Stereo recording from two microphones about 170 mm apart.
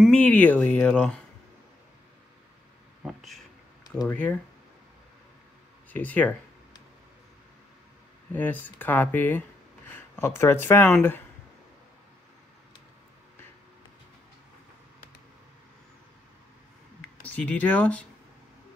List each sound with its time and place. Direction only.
0.0 s speech: 5° left (ahead or behind)
3.0 s a sound: centre (ahead or behind)
4.1 s speech: 10° left (ahead or behind)
5.9 s speech: 10° left (ahead or behind)
8.3 s speech: 10° left (ahead or behind)
17.0 s speech: 10° left (ahead or behind)